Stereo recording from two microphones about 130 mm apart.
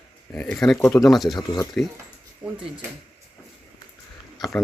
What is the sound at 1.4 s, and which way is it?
Speech, 30° left (ahead or behind).